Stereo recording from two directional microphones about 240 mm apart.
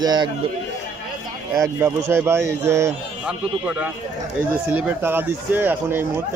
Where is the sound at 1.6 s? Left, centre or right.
Centre.